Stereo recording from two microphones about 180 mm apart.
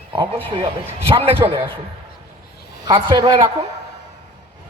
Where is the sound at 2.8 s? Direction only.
20° right (ahead or behind).